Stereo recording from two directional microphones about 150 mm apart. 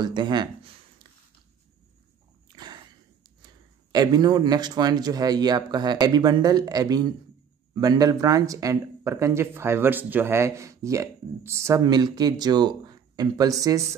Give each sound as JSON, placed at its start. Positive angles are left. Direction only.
{"t": 0.0, "sound": "speech", "side_deg": -30}
{"t": 2.5, "sound": "a sound", "side_deg": -30}
{"t": 3.4, "sound": "speech", "side_deg": -25}